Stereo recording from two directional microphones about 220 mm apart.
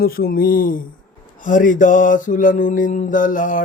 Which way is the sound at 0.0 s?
45° left (ahead or behind).